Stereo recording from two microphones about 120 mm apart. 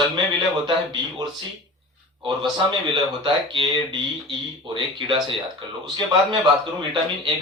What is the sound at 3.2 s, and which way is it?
A man's voice, 40° right (ahead or behind).